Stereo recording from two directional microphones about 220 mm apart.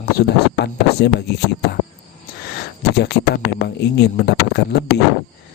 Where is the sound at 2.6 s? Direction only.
50° left (ahead or behind).